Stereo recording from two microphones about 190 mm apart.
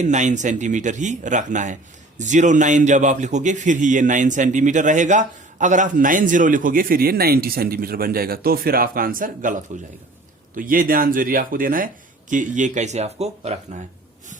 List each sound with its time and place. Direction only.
0.0 s speech: 40° right (ahead or behind)